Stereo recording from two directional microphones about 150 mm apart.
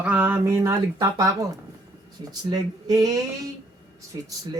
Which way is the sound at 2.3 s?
25° right (ahead or behind).